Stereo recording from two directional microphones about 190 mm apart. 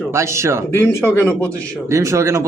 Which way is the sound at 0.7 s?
15° left (ahead or behind).